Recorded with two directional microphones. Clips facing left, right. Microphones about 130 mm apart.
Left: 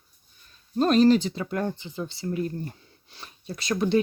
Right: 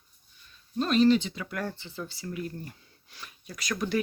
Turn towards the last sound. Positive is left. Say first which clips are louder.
# left 6 dB
turn(degrees=25)  # may be behind; listen again after turning